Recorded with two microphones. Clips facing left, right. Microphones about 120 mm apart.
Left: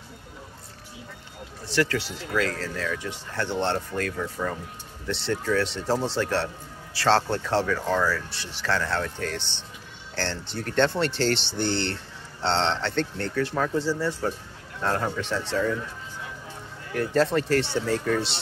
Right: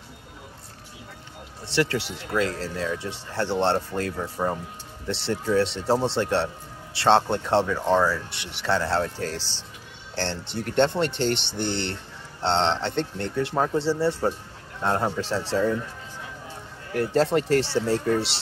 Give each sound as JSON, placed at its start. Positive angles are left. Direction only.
{"t": 1.7, "sound": "a man's voice", "side_deg": -25}
{"t": 16.9, "sound": "speech", "side_deg": -25}